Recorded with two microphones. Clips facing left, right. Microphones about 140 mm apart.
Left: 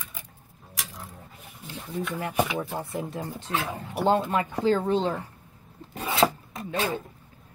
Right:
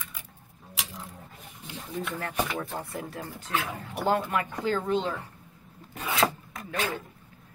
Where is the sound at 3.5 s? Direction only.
35° left (ahead or behind).